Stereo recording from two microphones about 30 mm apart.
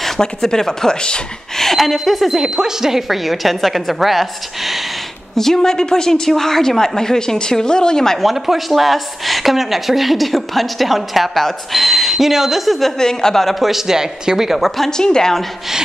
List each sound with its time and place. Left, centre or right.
0.2 s speech: centre
2.4 s speech: centre
3.1 s speech: centre
5.4 s a woman's voice: centre
8.2 s speech: centre
12.9 s a woman's voice: left
13.6 s speech: centre
14.9 s a woman's voice: left